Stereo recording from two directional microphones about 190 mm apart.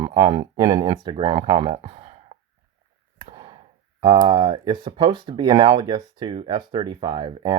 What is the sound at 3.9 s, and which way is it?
Speech, 25° right (ahead or behind).